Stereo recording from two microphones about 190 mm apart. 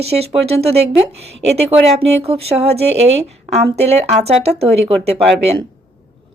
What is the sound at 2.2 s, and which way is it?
Speech, 30° right (ahead or behind).